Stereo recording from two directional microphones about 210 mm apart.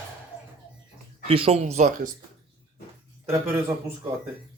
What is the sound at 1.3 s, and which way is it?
Speech, 30° right (ahead or behind).